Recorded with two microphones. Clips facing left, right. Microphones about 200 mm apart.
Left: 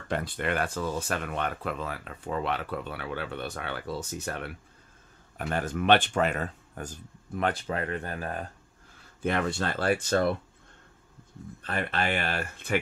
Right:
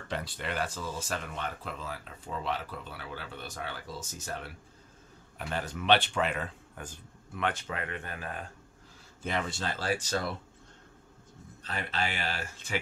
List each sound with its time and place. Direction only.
0.1 s speech: 55° left (ahead or behind)
5.4 s speech: 50° left (ahead or behind)
9.2 s speech: 60° left (ahead or behind)
11.6 s speech: 55° left (ahead or behind)